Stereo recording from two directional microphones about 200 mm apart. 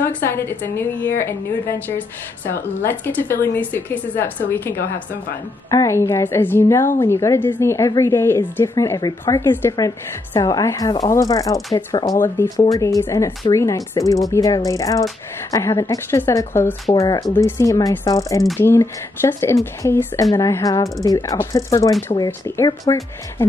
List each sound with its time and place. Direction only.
0.0 s a woman's voice: 10° left (ahead or behind)